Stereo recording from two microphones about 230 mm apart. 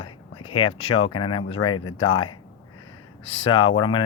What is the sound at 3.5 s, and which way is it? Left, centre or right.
Speech, left.